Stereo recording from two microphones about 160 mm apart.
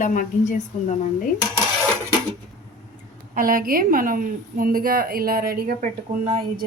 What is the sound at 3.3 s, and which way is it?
A woman's voice, 60° right (ahead or behind).